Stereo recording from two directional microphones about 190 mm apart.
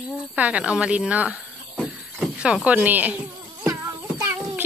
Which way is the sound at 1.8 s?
Centre (ahead or behind).